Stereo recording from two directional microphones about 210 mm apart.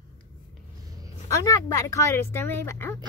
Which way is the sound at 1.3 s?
15° left (ahead or behind).